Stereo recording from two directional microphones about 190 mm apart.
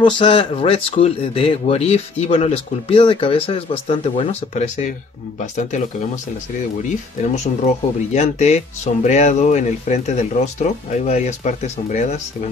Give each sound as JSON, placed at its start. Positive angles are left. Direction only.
{"t": 0.0, "sound": "speech", "side_deg": 30}
{"t": 7.6, "sound": "speech", "side_deg": 35}